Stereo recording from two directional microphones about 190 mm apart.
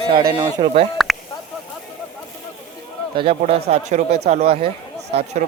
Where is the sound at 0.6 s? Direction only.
30° right (ahead or behind).